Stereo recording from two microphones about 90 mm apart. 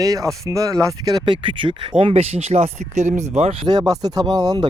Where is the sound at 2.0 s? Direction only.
90° right.